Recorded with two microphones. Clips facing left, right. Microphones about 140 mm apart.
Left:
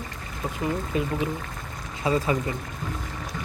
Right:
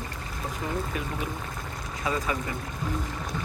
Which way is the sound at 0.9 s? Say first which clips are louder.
Left 6 dB; 25° left (ahead or behind).